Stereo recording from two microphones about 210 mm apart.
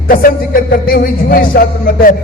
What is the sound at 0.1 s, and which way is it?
A man's voice, 45° left (ahead or behind).